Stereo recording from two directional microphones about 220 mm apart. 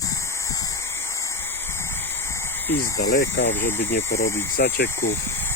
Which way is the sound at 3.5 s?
10° left (ahead or behind).